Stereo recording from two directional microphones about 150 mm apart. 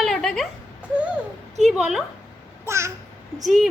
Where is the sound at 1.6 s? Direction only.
Centre (ahead or behind).